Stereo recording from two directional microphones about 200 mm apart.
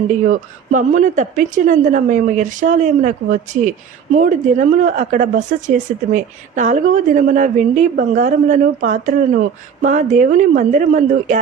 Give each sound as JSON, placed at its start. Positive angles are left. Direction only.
{"t": 0.1, "sound": "a woman's voice", "side_deg": -40}